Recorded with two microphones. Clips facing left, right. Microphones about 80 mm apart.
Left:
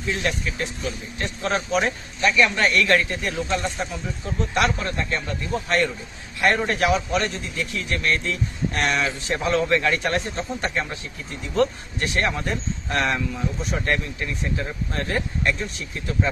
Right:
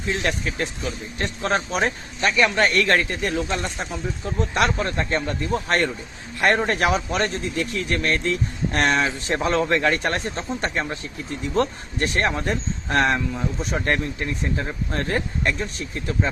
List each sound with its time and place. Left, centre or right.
0.2 s speech: right